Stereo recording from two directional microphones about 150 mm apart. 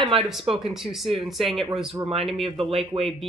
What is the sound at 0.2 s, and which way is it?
Speech, centre (ahead or behind).